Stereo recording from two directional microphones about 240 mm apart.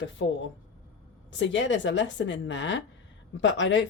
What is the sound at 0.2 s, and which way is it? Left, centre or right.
Speech, left.